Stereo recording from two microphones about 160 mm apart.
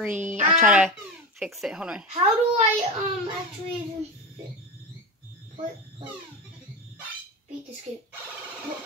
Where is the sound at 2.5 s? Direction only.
40° right (ahead or behind).